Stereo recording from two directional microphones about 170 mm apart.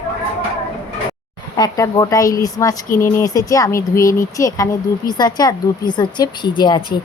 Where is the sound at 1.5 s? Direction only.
25° left (ahead or behind).